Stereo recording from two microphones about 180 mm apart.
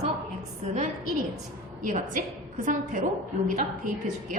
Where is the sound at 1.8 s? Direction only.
45° right (ahead or behind).